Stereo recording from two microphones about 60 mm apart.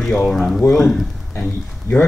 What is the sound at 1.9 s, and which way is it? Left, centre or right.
Speech, left.